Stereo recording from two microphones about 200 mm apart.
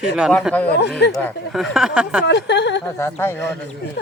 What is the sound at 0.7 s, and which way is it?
Speech, 55° left (ahead or behind).